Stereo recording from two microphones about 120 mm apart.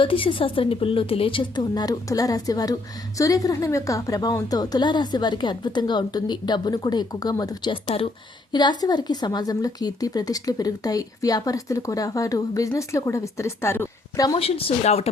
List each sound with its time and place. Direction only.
0.0 s a woman's voice: 50° left (ahead or behind); by 7.7 s 30° left (ahead or behind)
7.7 s a woman's voice: 50° left (ahead or behind)
8.5 s a woman's voice: 35° left (ahead or behind)
14.3 s a woman's voice: 50° left (ahead or behind)